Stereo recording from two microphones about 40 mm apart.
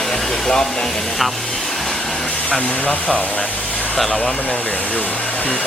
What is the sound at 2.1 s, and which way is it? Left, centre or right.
Vehicle, left.